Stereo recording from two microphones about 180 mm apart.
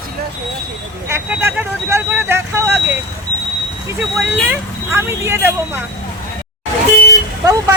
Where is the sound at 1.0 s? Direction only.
15° right (ahead or behind).